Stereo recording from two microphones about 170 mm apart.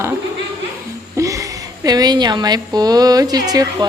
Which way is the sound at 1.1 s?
20° right (ahead or behind).